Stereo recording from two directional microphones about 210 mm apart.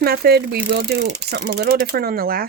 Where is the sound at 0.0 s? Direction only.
50° right (ahead or behind).